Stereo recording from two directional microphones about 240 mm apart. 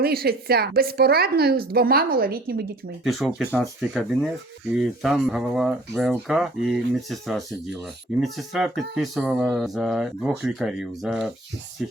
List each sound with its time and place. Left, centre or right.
0.0 s a woman's voice: right
3.0 s speech: centre